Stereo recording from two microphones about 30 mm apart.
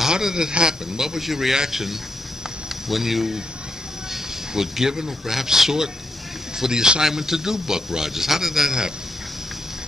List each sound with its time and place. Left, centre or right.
0.2 s speech: right